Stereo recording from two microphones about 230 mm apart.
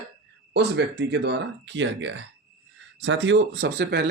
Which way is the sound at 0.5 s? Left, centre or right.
Right.